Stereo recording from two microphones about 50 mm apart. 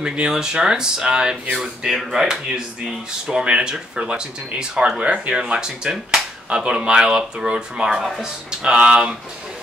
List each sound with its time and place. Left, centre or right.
0.0 s speech: centre
3.3 s speech: centre